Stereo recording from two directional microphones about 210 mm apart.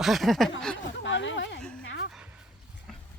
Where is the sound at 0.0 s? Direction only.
Centre (ahead or behind).